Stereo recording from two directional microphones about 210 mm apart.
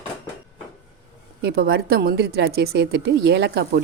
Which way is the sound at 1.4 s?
50° right (ahead or behind).